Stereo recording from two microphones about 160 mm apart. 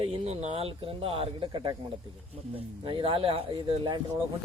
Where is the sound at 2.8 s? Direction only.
35° right (ahead or behind).